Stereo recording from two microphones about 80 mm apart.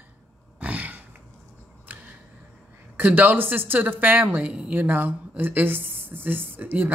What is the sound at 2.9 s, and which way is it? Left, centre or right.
Speech, right.